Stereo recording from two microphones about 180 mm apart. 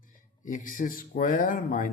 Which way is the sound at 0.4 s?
45° left (ahead or behind).